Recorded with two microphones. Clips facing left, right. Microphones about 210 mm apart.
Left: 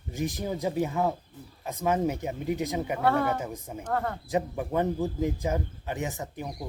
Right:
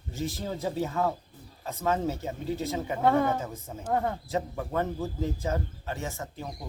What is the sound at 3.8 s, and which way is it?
Speech, 15° right (ahead or behind).